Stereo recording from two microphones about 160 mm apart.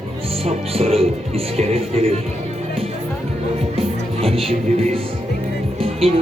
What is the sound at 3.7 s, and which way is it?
Music, 35° right (ahead or behind).